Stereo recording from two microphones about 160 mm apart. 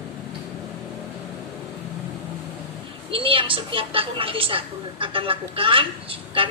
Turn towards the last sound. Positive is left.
turn(degrees=-35)  # may be behind; listen again after turning